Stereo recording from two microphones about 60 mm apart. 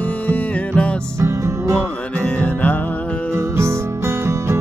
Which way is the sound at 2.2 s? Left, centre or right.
Left.